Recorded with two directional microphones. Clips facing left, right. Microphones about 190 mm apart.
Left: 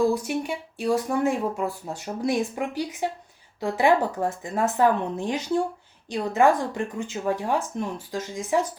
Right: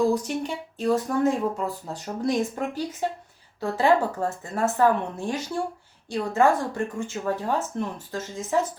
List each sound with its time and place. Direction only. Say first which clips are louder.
0.1 s speech: even; 10° left (ahead or behind)